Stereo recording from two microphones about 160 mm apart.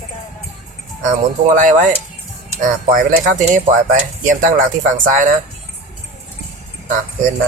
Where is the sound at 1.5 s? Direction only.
55° right (ahead or behind).